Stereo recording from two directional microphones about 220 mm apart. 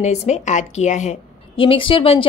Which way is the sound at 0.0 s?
30° left (ahead or behind).